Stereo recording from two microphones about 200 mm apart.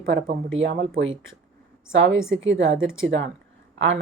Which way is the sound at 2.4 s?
65° right (ahead or behind).